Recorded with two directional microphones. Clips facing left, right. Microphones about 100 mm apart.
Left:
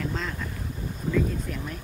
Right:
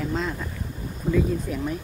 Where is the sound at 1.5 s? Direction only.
10° right (ahead or behind).